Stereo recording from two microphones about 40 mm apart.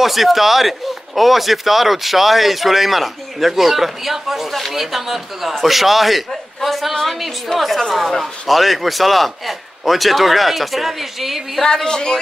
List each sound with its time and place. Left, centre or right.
0.0 s a man's voice: centre
11.6 s speech: centre